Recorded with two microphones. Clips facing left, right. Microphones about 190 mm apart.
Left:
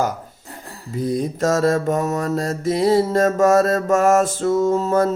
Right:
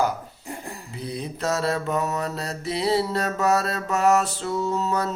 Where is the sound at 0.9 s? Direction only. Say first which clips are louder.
Left 11 dB; 45° left (ahead or behind).